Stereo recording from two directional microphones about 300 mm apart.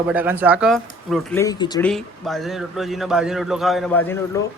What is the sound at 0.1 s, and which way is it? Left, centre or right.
A man's voice, centre.